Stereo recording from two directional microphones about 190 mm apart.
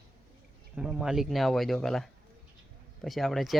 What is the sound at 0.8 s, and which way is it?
Speech, 5° right (ahead or behind).